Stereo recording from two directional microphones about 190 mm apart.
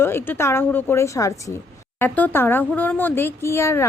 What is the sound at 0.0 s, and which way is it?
A woman's voice, 10° left (ahead or behind).